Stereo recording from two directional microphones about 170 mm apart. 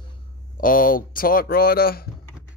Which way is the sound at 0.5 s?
55° left (ahead or behind).